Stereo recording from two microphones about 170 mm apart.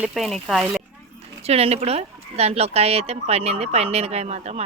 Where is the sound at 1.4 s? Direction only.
35° right (ahead or behind).